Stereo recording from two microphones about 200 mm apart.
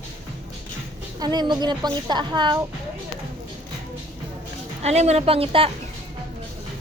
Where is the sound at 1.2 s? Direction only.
20° right (ahead or behind).